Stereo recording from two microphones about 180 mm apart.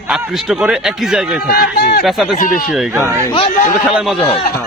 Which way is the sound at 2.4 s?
50° left (ahead or behind).